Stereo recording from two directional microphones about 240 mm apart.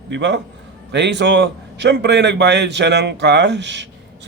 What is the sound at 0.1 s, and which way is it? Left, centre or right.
A man's voice, right.